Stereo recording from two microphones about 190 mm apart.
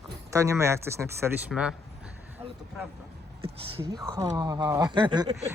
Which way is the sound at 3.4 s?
30° right (ahead or behind).